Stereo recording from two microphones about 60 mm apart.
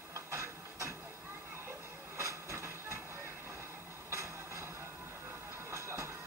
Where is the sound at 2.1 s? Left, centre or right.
Right.